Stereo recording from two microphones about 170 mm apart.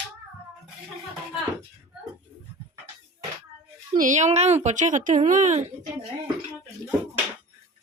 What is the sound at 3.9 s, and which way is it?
A woman's voice, 50° right (ahead or behind).